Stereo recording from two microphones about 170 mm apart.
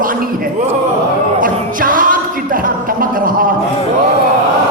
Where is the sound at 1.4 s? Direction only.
55° right (ahead or behind).